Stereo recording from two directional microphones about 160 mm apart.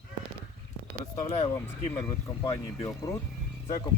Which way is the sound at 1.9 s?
15° left (ahead or behind).